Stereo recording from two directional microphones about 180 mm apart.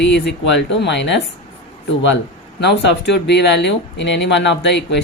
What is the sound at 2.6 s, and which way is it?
Speech, 70° left (ahead or behind).